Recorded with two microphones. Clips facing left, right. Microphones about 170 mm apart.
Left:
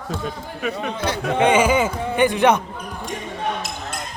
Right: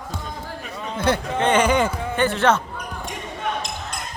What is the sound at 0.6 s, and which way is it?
Speech, 75° left (ahead or behind).